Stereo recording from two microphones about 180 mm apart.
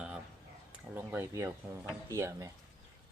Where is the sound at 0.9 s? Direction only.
10° right (ahead or behind).